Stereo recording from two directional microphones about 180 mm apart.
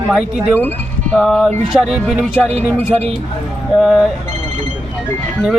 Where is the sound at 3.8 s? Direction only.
Centre (ahead or behind).